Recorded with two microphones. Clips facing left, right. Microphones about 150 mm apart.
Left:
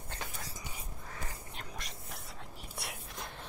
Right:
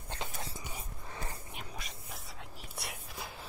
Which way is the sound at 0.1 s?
25° right (ahead or behind).